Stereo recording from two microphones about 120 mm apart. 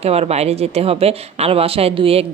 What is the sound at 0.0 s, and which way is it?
Speech, 60° right (ahead or behind).